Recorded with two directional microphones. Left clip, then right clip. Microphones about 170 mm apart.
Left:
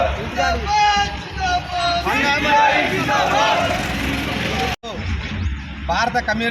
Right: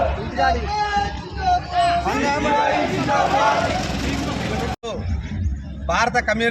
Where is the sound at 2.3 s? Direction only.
90° right.